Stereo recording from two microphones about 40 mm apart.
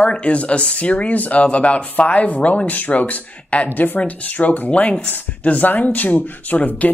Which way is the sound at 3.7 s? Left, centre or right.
Left.